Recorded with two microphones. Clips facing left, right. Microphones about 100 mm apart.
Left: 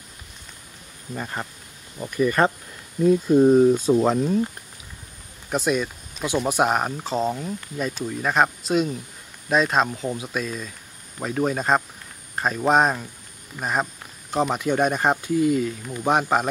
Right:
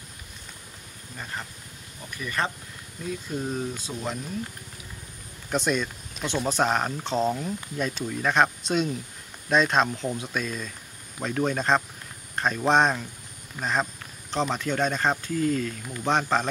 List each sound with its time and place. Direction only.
1.1 s speech: 80° left
2.0 s speech: 45° left (ahead or behind)
5.5 s speech: 5° left (ahead or behind)